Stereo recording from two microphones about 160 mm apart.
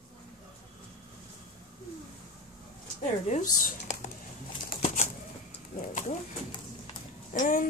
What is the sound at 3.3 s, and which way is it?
Speech, 50° left (ahead or behind).